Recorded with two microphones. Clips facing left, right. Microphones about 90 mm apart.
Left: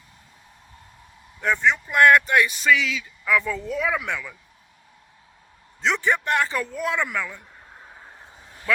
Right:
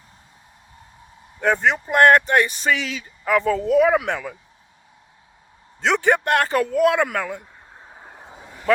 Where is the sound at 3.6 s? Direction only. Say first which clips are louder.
Right 9 dB; 60° right (ahead or behind).